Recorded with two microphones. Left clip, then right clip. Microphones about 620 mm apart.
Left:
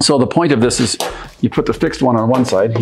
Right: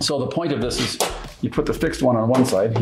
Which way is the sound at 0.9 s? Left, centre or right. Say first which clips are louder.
Left 2 dB; left.